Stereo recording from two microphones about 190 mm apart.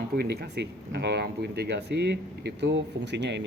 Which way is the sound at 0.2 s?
60° right (ahead or behind).